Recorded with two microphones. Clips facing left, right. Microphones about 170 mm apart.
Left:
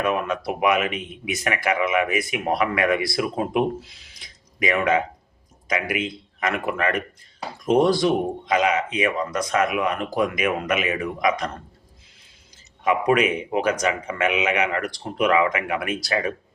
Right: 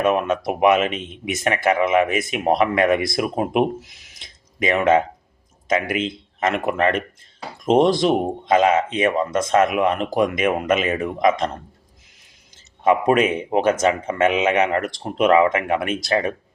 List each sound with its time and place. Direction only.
0.0 s speech: 20° right (ahead or behind)
12.8 s speech: 25° right (ahead or behind)